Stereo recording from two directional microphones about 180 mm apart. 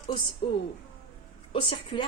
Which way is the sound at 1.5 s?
30° left (ahead or behind).